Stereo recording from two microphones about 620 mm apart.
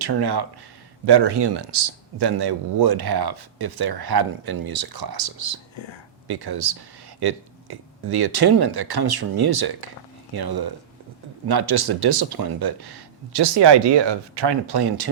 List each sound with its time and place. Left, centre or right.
0.0 s speech: right
5.7 s speech: left
6.2 s speech: right